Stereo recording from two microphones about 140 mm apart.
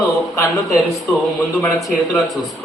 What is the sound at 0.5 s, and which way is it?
Speech, centre (ahead or behind).